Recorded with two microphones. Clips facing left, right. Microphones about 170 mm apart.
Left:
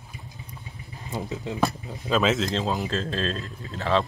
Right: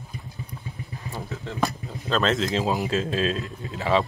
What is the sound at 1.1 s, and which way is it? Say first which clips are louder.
Speech: left 4 dB; 20° left (ahead or behind).